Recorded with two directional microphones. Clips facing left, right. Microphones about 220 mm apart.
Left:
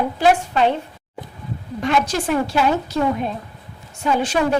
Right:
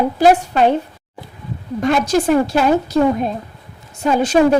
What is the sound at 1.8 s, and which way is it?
A woman's voice, 45° right (ahead or behind).